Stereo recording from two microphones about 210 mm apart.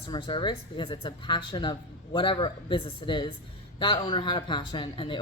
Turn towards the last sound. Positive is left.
turn(degrees=25)  # may be behind; listen again after turning